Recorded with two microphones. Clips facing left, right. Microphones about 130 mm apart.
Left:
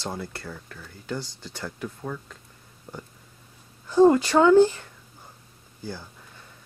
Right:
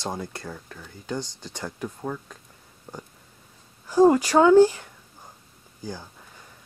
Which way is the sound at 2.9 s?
20° right (ahead or behind).